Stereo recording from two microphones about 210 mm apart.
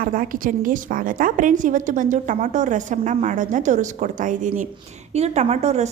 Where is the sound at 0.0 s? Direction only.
40° right (ahead or behind).